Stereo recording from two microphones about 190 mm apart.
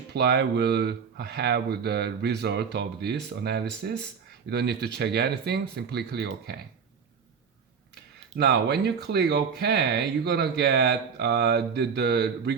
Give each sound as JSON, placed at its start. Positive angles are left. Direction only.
{"t": 0.1, "sound": "speech", "side_deg": -60}
{"t": 8.4, "sound": "speech", "side_deg": -60}